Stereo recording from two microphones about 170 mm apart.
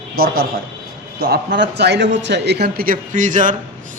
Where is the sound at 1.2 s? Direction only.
80° right; by 3.5 s 50° right (ahead or behind).